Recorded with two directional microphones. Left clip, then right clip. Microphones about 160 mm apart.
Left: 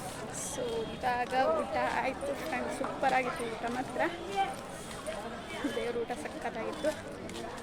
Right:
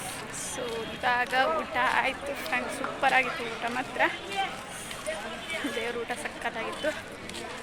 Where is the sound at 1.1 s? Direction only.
5° left (ahead or behind).